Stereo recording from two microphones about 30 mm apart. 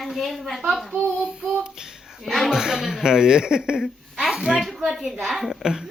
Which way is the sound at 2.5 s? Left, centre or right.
Right.